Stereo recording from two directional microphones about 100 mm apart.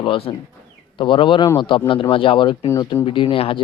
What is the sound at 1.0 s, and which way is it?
Speech, 55° left (ahead or behind).